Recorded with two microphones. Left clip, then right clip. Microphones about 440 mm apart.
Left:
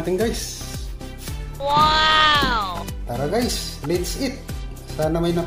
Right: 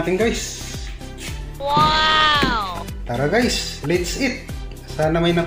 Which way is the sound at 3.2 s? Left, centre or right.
Left.